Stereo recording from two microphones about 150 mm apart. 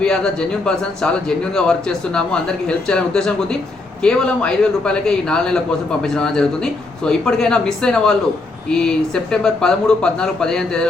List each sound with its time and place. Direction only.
0.0 s a man's voice: 5° left (ahead or behind)